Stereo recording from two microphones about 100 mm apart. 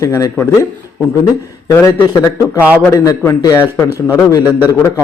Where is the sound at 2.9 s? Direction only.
30° left (ahead or behind).